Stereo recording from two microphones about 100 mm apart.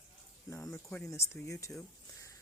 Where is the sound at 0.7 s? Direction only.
10° left (ahead or behind).